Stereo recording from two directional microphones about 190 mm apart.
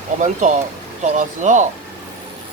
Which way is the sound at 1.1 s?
40° right (ahead or behind).